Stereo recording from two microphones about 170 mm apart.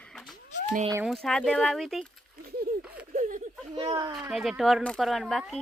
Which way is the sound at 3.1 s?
50° right (ahead or behind).